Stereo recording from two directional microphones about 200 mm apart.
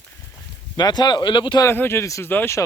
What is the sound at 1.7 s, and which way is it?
Speech, 10° left (ahead or behind).